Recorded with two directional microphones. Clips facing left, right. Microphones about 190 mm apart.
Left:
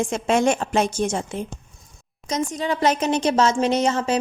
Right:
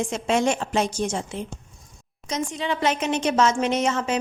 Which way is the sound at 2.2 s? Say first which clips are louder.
Left 3 dB; 40° left (ahead or behind).